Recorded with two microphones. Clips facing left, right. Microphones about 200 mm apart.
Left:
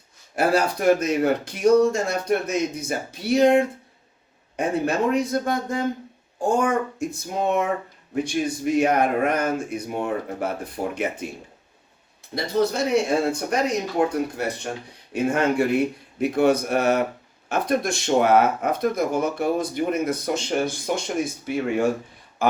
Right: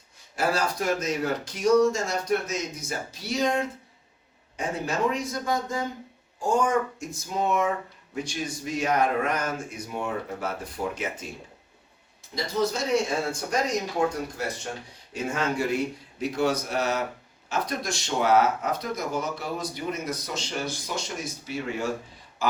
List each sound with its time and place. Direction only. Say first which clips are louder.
0.3 s speech: left 5 dB; 60° left (ahead or behind)
12.3 s speech: left 4 dB; 60° left (ahead or behind)
22.4 s a sound: left 6 dB; 55° left (ahead or behind)